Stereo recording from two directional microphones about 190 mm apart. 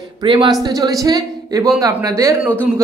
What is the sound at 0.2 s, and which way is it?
A man's voice, 25° right (ahead or behind).